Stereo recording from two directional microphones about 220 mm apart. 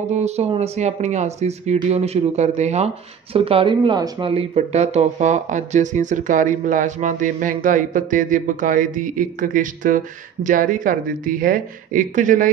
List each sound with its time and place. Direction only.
0.1 s speech: 30° right (ahead or behind)